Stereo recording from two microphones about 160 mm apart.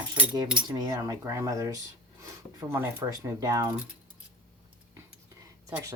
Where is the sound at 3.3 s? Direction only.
20° right (ahead or behind).